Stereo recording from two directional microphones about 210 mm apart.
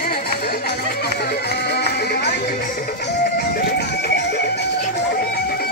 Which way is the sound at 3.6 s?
50° left (ahead or behind).